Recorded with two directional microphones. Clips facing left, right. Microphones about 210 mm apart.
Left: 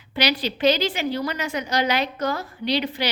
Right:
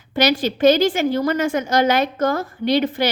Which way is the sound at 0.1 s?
45° right (ahead or behind).